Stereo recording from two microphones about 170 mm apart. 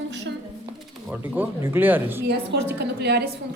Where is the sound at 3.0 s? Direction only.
75° right (ahead or behind).